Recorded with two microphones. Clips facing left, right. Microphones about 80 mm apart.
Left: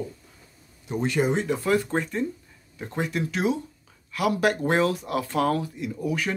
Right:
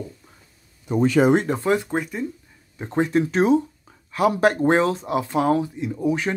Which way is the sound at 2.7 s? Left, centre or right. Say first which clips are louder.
Right 8 dB; right.